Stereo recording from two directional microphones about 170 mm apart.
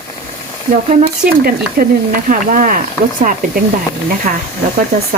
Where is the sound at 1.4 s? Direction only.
60° right (ahead or behind).